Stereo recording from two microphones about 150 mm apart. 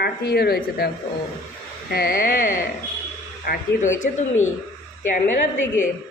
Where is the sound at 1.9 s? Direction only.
80° left.